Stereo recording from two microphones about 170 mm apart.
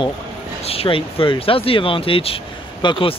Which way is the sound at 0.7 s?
35° left (ahead or behind).